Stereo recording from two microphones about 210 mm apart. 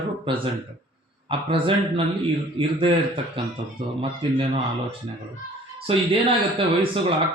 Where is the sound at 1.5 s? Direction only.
25° right (ahead or behind).